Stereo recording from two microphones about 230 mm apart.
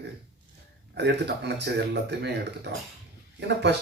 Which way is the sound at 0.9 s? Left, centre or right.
Right.